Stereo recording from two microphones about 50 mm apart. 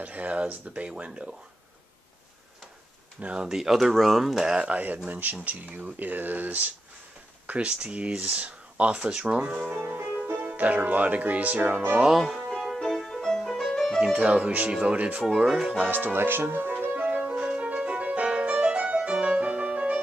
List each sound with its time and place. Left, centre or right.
0.0 s speech: right
3.2 s speech: right
3.4 s speech: centre
4.7 s speech: right
7.4 s speech: right
12.1 s music: centre
14.1 s speech: right
15.2 s speech: centre
15.9 s speech: right
16.9 s music: right